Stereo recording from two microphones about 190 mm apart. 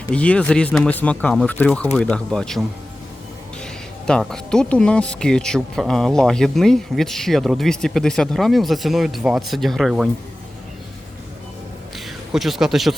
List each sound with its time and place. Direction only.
0.1 s speech: 5° left (ahead or behind)
11.9 s speech: centre (ahead or behind)